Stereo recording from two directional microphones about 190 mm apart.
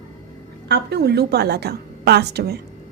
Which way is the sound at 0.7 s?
60° right (ahead or behind).